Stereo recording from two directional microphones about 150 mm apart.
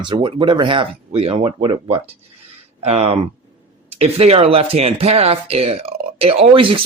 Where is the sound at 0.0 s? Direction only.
30° right (ahead or behind).